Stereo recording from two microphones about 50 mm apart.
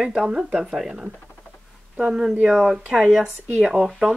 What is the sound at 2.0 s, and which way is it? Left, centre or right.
Speech, centre.